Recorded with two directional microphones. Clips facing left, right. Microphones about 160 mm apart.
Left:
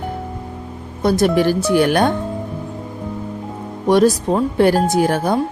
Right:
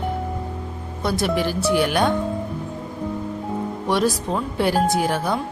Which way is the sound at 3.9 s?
45° left (ahead or behind).